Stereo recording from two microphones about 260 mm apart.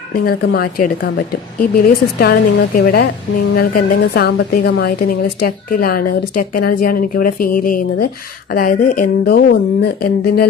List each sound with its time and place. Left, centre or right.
0.1 s a woman's voice: left